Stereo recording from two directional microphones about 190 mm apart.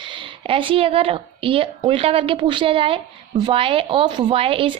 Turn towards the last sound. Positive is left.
turn(degrees=-30)  # may be behind; listen again after turning